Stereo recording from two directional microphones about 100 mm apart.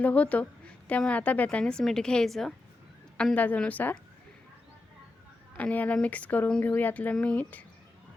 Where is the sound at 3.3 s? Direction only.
15° left (ahead or behind).